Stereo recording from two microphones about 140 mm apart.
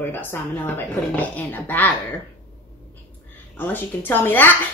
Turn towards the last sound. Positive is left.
turn(degrees=15)  # may be behind; listen again after turning